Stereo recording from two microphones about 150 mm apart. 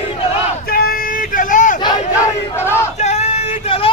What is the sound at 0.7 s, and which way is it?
Vehicle, 80° left.